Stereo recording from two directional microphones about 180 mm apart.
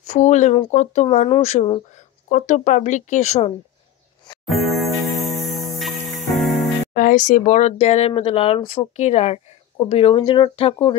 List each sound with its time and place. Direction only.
0.0 s speech: 40° left (ahead or behind)
4.5 s music: centre (ahead or behind)
7.0 s speech: 45° left (ahead or behind); by 11.0 s 30° left (ahead or behind)